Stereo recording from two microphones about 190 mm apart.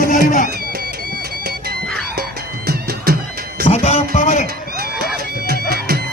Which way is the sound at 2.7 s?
55° right (ahead or behind).